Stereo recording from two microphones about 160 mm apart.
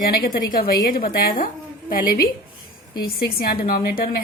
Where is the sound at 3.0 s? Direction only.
75° left (ahead or behind).